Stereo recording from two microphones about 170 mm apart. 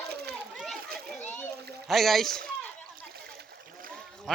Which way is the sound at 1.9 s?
Centre (ahead or behind).